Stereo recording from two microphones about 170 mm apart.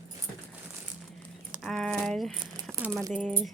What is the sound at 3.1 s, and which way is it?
Speech, centre (ahead or behind).